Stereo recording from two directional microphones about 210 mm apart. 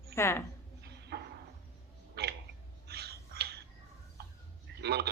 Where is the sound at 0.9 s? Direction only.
50° right (ahead or behind).